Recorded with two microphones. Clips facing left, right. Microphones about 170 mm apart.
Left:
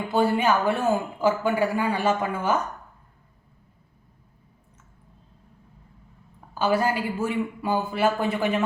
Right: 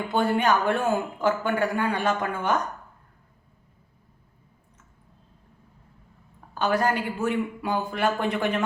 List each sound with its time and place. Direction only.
0.1 s speech: 5° left (ahead or behind)
6.5 s speech: 5° left (ahead or behind)